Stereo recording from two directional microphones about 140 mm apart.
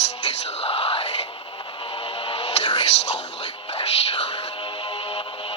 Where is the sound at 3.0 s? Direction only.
45° left (ahead or behind).